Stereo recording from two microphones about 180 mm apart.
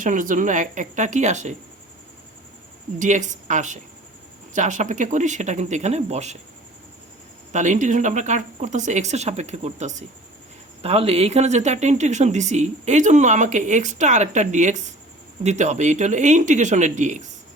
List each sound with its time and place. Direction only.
0.0 s speech: 45° right (ahead or behind)
3.0 s speech: 45° right (ahead or behind)
7.5 s speech: 40° right (ahead or behind)